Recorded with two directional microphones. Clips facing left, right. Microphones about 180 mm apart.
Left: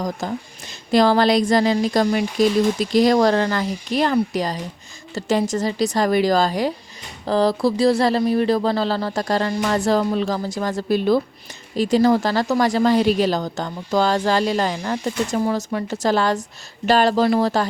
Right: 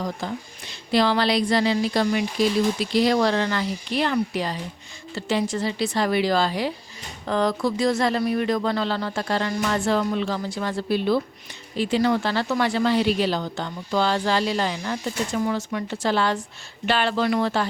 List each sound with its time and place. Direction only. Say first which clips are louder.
0.0 s a woman's voice: left 4 dB; 45° left (ahead or behind)